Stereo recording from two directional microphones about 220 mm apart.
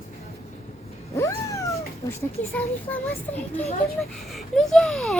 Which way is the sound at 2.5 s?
10° left (ahead or behind).